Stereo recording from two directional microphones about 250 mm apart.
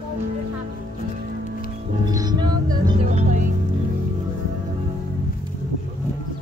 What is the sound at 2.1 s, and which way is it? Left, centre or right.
Music, centre.